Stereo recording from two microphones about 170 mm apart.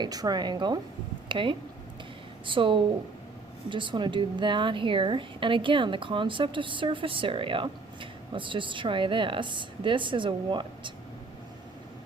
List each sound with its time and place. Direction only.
0.0 s a woman's voice: 25° right (ahead or behind)